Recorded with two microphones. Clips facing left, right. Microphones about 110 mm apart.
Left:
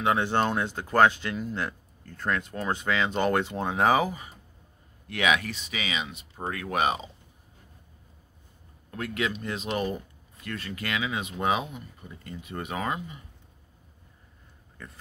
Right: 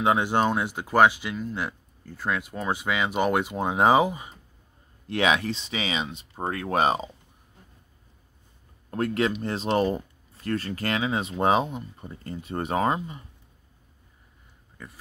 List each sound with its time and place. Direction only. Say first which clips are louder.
0.0 s speech: right 2 dB; 15° right (ahead or behind); by 7.1 s 30° right (ahead or behind)
8.9 s speech: right 6 dB; 35° right (ahead or behind)
14.8 s speech: right 1 dB; 10° right (ahead or behind)